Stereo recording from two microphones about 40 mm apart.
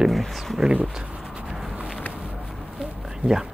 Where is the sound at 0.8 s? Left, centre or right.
Right.